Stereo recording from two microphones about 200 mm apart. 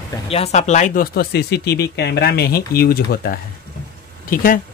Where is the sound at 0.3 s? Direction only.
30° left (ahead or behind).